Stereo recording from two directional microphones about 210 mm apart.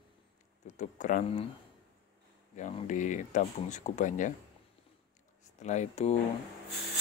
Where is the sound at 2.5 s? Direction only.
35° left (ahead or behind).